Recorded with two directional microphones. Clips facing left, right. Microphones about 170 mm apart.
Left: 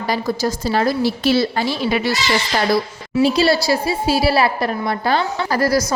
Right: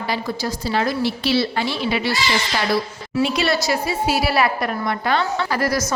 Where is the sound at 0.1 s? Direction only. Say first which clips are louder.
Left 5 dB; 45° left (ahead or behind).